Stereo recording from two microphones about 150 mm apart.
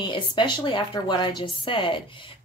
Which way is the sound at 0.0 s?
30° left (ahead or behind).